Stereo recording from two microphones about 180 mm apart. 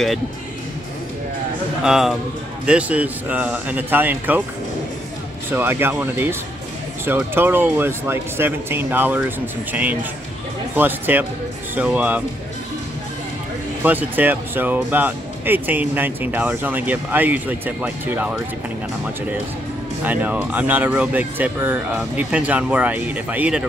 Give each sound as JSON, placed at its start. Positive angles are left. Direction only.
{"t": 1.8, "sound": "a man's voice", "side_deg": -5}
{"t": 5.5, "sound": "speech", "side_deg": -10}
{"t": 13.8, "sound": "speech", "side_deg": -10}
{"t": 20.0, "sound": "speech", "side_deg": -10}